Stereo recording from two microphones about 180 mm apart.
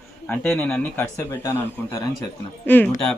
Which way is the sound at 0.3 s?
5° left (ahead or behind).